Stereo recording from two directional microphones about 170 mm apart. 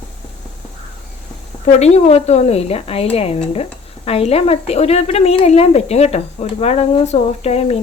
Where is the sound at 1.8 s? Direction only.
35° left (ahead or behind).